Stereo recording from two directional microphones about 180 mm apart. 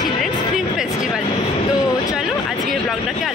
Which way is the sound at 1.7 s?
20° left (ahead or behind).